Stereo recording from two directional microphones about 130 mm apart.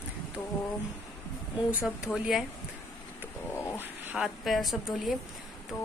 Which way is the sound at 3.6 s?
15° left (ahead or behind).